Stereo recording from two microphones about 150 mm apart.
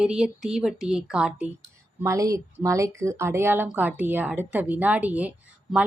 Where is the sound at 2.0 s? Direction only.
20° right (ahead or behind).